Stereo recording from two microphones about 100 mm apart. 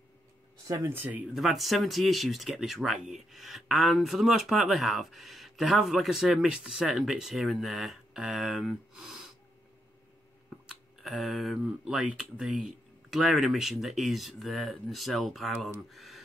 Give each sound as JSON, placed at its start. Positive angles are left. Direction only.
{"t": 0.7, "sound": "speech", "side_deg": -25}
{"t": 1.3, "sound": "speech", "side_deg": 0}
{"t": 10.7, "sound": "speech", "side_deg": 0}